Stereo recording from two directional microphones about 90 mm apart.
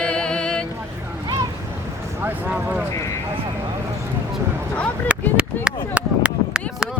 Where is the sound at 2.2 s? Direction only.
20° right (ahead or behind).